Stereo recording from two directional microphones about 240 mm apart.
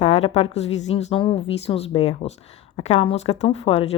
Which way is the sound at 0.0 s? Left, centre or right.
Left.